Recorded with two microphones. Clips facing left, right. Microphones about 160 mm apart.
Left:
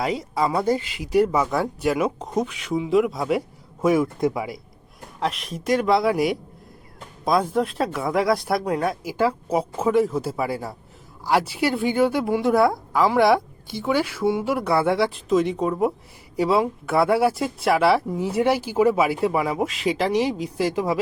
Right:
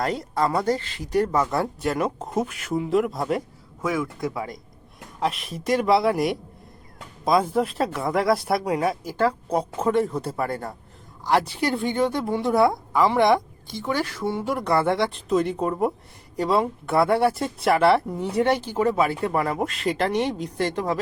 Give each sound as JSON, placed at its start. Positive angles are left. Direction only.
{"t": 0.0, "sound": "a woman's voice", "side_deg": 5}
{"t": 3.8, "sound": "speech", "side_deg": 25}
{"t": 4.4, "sound": "a man's voice", "side_deg": 5}